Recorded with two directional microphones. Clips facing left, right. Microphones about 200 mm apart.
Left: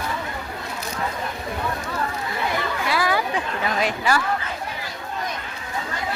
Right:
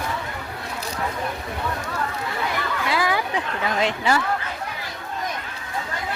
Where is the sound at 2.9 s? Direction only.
20° right (ahead or behind).